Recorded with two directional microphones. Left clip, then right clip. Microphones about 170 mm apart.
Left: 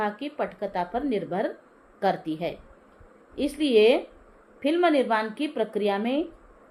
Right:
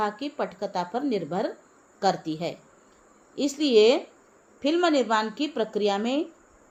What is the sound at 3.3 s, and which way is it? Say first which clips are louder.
A woman's voice: right 1 dB; 30° right (ahead or behind).